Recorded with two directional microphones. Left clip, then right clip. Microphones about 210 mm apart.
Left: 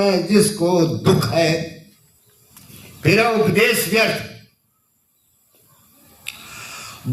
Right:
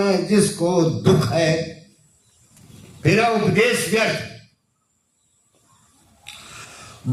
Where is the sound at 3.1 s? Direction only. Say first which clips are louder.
Left 2 dB; 40° left (ahead or behind).